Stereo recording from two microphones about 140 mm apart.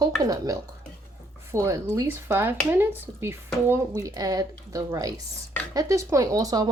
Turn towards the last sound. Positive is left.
turn(degrees=-30)  # may be behind; listen again after turning